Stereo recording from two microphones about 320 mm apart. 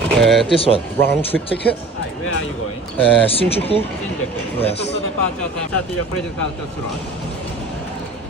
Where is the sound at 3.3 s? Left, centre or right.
Centre.